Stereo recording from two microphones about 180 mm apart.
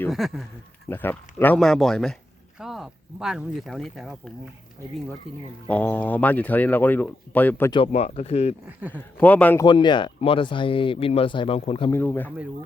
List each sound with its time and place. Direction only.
0.1 s speech: centre (ahead or behind)
0.9 s speech: 10° left (ahead or behind)
5.6 s speech: 10° left (ahead or behind)
7.7 s speech: 30° left (ahead or behind)
8.9 s speech: 10° left (ahead or behind)
9.6 s speech: 25° left (ahead or behind)
11.9 s speech: 10° left (ahead or behind)